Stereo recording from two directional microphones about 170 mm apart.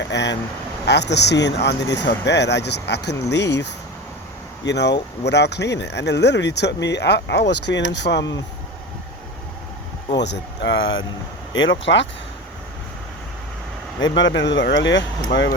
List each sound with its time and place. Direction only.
0.0 s a sound: 90° left
0.9 s speech: 85° left
10.2 s speech: 90° left
14.0 s speech: 90° left